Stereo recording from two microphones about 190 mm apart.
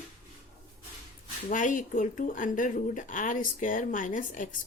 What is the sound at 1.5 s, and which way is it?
A woman's voice, 45° left (ahead or behind).